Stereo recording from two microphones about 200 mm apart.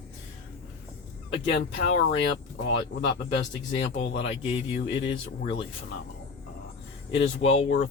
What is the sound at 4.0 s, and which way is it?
Speech, 70° left (ahead or behind).